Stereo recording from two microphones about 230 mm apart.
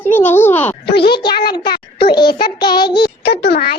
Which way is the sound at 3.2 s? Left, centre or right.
Left.